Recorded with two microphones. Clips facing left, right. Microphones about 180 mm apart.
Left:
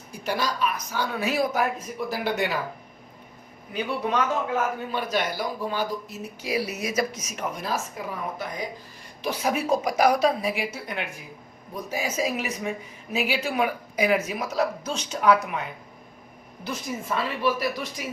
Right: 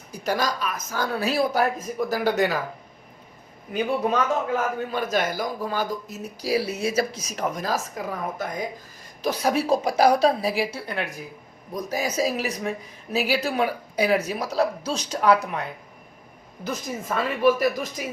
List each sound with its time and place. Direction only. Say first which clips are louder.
0.1 s speech: right 3 dB; 45° right (ahead or behind)
3.7 s speech: right 4 dB; 45° right (ahead or behind)
16.6 s speech: right 1 dB; 45° right (ahead or behind)